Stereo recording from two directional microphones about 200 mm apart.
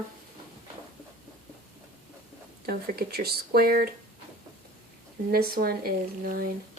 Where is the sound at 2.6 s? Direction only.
50° right (ahead or behind).